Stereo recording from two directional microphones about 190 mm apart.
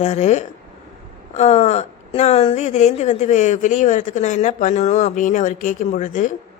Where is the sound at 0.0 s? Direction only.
35° left (ahead or behind).